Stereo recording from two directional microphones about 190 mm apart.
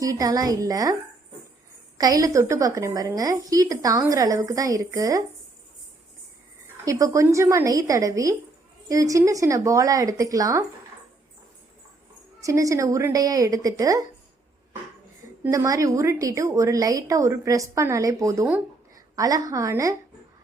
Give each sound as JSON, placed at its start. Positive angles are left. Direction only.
{"t": 0.0, "sound": "a woman's voice", "side_deg": -20}
{"t": 2.0, "sound": "a woman's voice", "side_deg": -20}
{"t": 6.8, "sound": "a woman's voice", "side_deg": -15}
{"t": 12.4, "sound": "a woman's voice", "side_deg": -15}
{"t": 15.4, "sound": "a woman's voice", "side_deg": -15}